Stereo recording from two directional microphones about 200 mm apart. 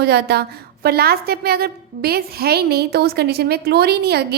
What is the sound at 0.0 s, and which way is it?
A woman's voice, 55° right (ahead or behind).